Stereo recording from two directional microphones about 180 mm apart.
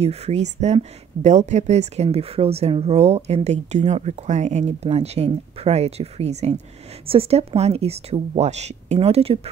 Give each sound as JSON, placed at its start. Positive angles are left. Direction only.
{"t": 0.0, "sound": "speech", "side_deg": -35}